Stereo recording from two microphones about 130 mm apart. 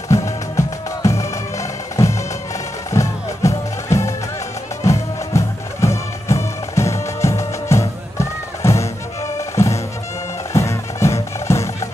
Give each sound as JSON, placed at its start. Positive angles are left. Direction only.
{"t": 0.1, "sound": "music", "side_deg": 25}